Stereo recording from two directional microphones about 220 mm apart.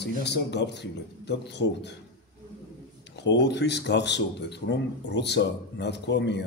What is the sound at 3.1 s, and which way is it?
A man's voice, 50° left (ahead or behind).